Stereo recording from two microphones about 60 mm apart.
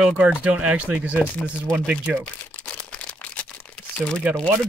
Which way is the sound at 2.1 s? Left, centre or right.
Centre.